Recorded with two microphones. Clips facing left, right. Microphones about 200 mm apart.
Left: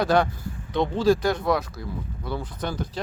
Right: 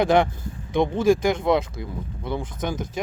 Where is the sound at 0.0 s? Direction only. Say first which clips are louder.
Right 2 dB; 20° right (ahead or behind).